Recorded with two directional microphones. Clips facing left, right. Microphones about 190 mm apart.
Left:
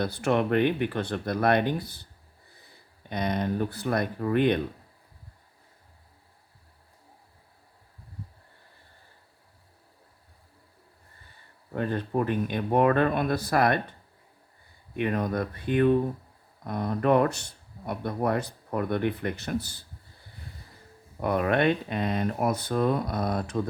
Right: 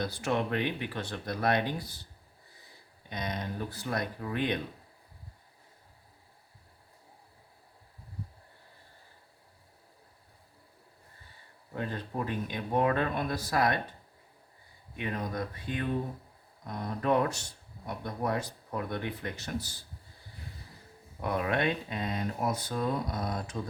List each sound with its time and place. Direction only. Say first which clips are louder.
0.0 s speech: left 6 dB; 60° left (ahead or behind)
3.1 s speech: left 8 dB; 55° left (ahead or behind)
11.7 s speech: left 8 dB; 60° left (ahead or behind)
14.9 s speech: left 7 dB; 65° left (ahead or behind)
21.2 s speech: left 6 dB; 55° left (ahead or behind)